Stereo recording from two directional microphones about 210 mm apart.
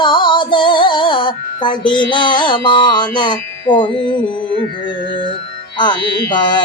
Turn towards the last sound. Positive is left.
turn(degrees=20)  # may be behind; listen again after turning